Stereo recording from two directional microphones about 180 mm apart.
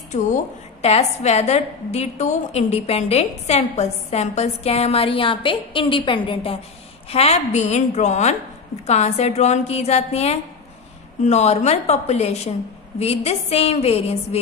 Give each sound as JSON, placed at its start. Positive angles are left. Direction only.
{"t": 0.8, "sound": "a woman's voice", "side_deg": 35}